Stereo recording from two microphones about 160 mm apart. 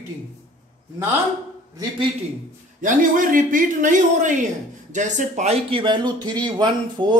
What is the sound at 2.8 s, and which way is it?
Speech, 60° right (ahead or behind).